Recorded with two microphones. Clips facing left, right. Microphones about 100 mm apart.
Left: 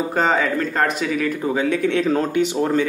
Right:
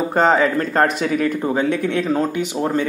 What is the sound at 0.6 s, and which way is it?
Speech, 40° right (ahead or behind).